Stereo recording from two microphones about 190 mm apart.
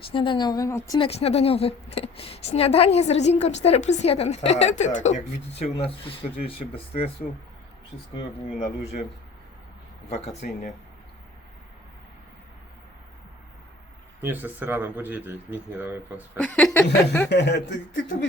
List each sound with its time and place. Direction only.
0.1 s speech: 25° left (ahead or behind)
0.9 s a woman's voice: 30° left (ahead or behind)
8.8 s a woman's voice: 35° left (ahead or behind)
10.1 s a woman's voice: 35° left (ahead or behind)
14.2 s speech: 10° right (ahead or behind)
16.4 s speech: 5° left (ahead or behind)
17.2 s speech: 65° left (ahead or behind)